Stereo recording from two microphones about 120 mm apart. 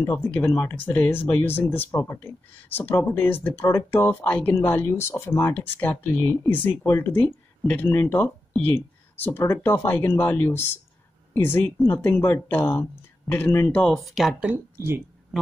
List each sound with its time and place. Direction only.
0.0 s speech: 20° left (ahead or behind)
13.9 s speech: centre (ahead or behind)